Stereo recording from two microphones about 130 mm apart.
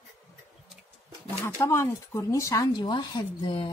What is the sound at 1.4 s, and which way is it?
Speech, 20° left (ahead or behind).